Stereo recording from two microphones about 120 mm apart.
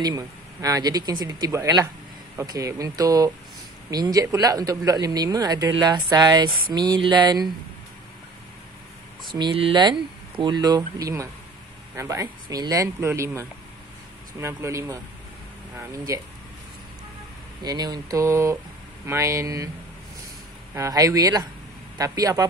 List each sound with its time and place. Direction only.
0.0 s speech: 30° right (ahead or behind)
9.3 s speech: 40° right (ahead or behind); by 15.0 s 25° right (ahead or behind)
17.6 s speech: 35° right (ahead or behind)
20.7 s speech: 30° right (ahead or behind)